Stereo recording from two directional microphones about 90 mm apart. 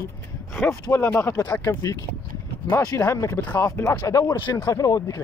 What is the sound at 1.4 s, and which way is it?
Speech, 45° left (ahead or behind).